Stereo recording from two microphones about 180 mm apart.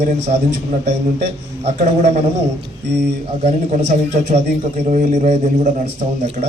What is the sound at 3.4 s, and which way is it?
A man's voice, 40° right (ahead or behind).